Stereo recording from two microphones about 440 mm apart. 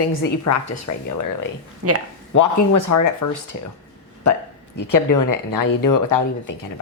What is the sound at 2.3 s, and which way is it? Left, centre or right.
Speech, left.